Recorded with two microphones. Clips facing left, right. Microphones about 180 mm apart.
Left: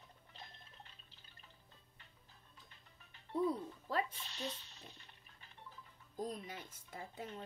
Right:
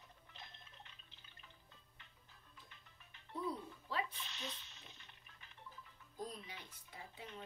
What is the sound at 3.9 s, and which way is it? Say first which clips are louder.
Water: left 4 dB; 40° left (ahead or behind).